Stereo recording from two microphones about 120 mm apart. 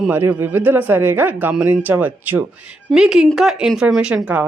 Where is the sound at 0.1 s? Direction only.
15° right (ahead or behind).